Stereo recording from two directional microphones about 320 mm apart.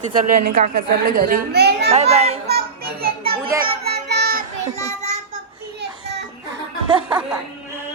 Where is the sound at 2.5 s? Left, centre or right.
Right.